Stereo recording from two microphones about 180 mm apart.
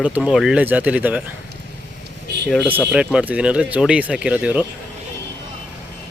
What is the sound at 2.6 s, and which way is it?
Speech, 5° right (ahead or behind).